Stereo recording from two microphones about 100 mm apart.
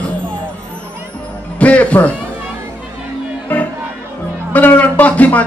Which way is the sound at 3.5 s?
15° left (ahead or behind).